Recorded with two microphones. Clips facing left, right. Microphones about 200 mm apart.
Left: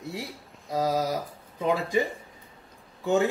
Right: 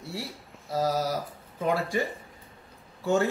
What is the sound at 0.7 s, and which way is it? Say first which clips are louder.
A man's voice: left 1 dB; 15° left (ahead or behind).